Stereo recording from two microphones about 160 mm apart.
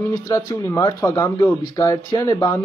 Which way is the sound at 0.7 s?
20° left (ahead or behind).